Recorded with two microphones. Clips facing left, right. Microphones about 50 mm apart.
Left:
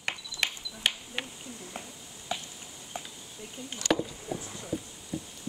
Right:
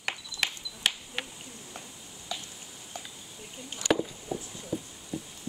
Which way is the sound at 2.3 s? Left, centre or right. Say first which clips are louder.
Left 3 dB; left.